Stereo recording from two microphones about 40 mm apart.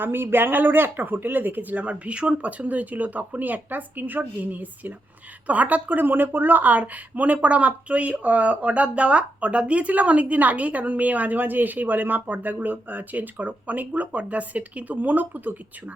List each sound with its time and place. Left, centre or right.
0.0 s speech: right